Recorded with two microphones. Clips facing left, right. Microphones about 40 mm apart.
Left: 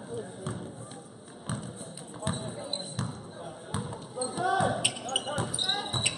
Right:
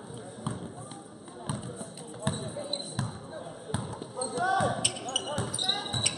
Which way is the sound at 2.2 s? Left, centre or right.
Centre.